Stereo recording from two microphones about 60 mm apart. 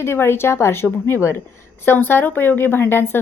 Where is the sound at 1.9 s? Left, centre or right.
Left.